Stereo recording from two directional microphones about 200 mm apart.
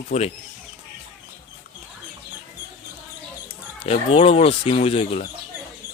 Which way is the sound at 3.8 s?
30° left (ahead or behind).